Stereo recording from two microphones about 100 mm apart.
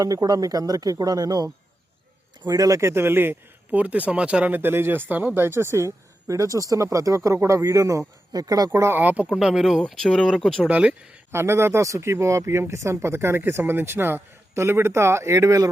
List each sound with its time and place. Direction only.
0.0 s speech: 35° right (ahead or behind)
2.5 s a man's voice: 35° right (ahead or behind)
9.0 s speech: 15° right (ahead or behind)
9.3 s speech: 5° right (ahead or behind)
9.8 s speech: 5° left (ahead or behind)
10.6 s speech: 10° right (ahead or behind)
11.3 s a man's voice: 25° right (ahead or behind)